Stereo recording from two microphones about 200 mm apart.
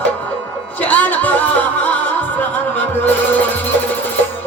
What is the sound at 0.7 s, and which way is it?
Music, 10° left (ahead or behind).